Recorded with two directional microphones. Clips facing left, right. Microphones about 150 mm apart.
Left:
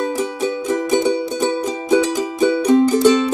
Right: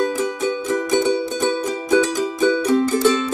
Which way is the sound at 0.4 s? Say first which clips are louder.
Left 1 dB; 15° left (ahead or behind).